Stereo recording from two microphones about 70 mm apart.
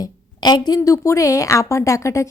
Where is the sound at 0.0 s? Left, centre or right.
Left.